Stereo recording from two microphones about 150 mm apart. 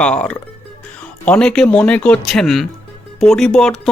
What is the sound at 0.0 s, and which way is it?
Speech, 5° left (ahead or behind).